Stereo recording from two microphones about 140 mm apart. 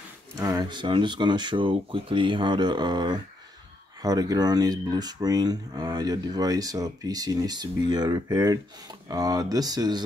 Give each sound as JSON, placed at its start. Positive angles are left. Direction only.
{"t": 0.4, "sound": "speech", "side_deg": -25}